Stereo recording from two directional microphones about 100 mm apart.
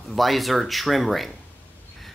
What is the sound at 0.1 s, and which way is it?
Speech, centre (ahead or behind).